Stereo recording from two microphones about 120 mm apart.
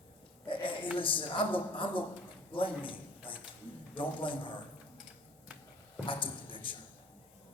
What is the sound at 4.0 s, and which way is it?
Speech, 45° left (ahead or behind).